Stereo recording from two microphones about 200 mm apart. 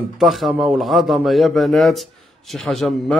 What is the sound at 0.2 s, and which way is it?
A man's voice, centre (ahead or behind).